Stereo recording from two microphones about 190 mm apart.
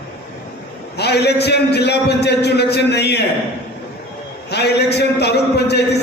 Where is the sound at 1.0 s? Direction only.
60° left (ahead or behind).